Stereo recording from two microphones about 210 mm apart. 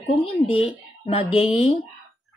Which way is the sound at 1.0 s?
25° left (ahead or behind).